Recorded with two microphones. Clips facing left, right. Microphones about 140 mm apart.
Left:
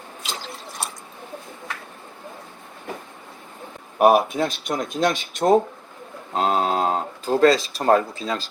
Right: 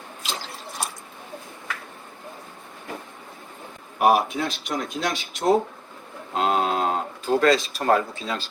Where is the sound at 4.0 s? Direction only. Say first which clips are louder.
Left 3 dB; 45° left (ahead or behind).